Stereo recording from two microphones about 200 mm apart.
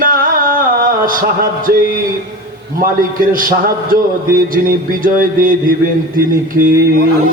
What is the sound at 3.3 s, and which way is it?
A man's voice, 45° right (ahead or behind).